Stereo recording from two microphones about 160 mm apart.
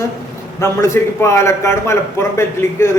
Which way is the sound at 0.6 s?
15° left (ahead or behind).